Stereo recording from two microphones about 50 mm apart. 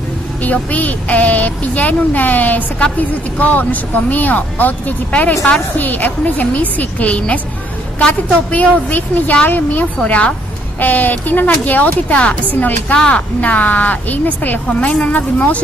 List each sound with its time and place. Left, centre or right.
0.4 s speech: left
8.5 s speech: left
14.9 s speech: left